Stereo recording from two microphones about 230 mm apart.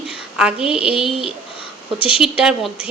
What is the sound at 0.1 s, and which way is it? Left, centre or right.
A woman's voice, centre.